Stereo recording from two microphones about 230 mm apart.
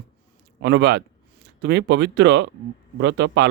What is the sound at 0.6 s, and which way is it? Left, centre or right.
Speech, right.